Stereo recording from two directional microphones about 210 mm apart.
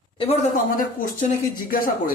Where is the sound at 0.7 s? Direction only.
40° left (ahead or behind).